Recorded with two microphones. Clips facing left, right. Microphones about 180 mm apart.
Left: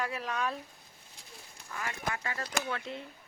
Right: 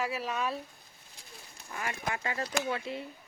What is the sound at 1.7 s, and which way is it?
Speech, 20° right (ahead or behind).